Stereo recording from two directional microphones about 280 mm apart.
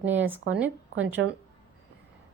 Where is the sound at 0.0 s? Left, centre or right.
Centre.